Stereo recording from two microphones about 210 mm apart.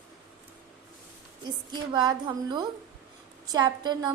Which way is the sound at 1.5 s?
20° right (ahead or behind).